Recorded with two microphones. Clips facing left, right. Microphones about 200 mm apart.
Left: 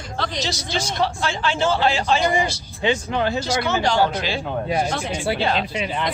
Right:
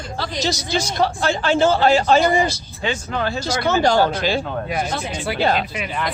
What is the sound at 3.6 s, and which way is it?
Speech, 40° right (ahead or behind).